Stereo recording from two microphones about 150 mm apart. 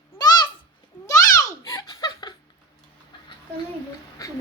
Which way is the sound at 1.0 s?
20° left (ahead or behind).